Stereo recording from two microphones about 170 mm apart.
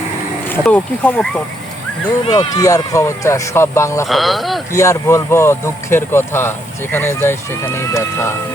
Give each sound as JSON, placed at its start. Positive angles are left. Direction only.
{"t": 0.5, "sound": "speech", "side_deg": 10}
{"t": 2.2, "sound": "speech", "side_deg": 25}
{"t": 4.0, "sound": "speech", "side_deg": 0}
{"t": 4.7, "sound": "speech", "side_deg": 20}